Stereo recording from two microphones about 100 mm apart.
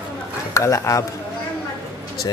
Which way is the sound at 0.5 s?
30° left (ahead or behind).